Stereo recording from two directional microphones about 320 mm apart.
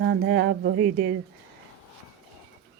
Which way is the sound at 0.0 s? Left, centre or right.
Right.